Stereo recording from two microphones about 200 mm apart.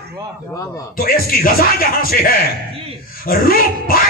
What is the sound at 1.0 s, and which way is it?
Speech, 45° left (ahead or behind).